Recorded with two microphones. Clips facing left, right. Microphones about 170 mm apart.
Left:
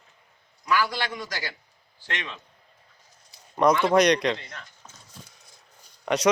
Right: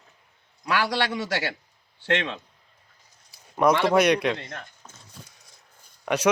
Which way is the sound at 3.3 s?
5° right (ahead or behind).